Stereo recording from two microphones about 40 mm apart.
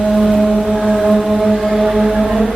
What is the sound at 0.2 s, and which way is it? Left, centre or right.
Vehicle, centre.